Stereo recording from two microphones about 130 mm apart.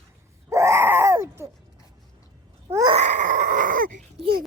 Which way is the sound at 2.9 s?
65° right (ahead or behind).